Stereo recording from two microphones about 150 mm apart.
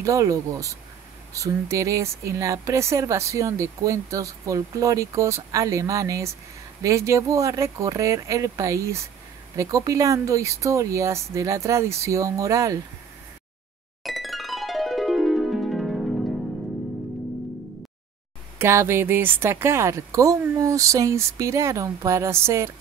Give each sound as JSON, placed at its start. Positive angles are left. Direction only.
{"t": 0.0, "sound": "speech", "side_deg": -20}
{"t": 14.0, "sound": "music", "side_deg": 0}
{"t": 18.6, "sound": "speech", "side_deg": -15}